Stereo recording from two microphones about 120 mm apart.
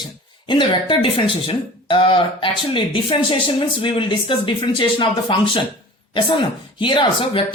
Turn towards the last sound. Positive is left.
turn(degrees=45)  # may be behind; listen again after turning